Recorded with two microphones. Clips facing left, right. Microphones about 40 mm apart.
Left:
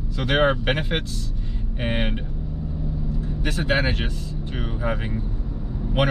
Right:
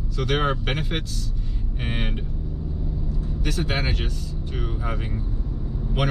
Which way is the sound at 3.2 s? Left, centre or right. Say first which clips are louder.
Left 2 dB; left.